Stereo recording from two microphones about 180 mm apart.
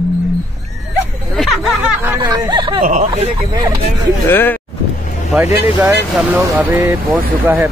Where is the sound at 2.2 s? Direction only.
25° right (ahead or behind).